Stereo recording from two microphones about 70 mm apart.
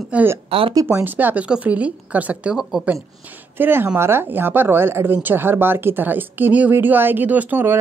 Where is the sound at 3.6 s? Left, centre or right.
Right.